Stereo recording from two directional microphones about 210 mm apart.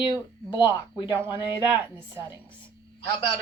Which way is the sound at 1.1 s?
10° right (ahead or behind).